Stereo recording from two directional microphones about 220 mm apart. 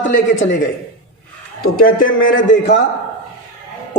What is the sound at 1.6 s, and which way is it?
Speech, 40° left (ahead or behind).